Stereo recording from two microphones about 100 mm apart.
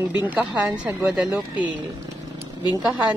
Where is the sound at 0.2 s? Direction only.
15° right (ahead or behind).